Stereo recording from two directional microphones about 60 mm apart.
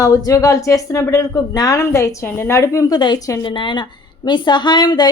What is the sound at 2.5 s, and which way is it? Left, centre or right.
Speech, left.